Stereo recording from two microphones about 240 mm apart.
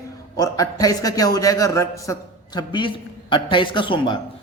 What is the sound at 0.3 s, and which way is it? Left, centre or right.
A man's voice, centre.